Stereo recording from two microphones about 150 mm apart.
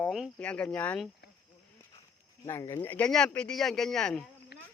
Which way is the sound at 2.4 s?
20° left (ahead or behind).